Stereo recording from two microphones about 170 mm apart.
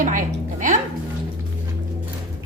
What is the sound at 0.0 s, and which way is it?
Music, 50° right (ahead or behind).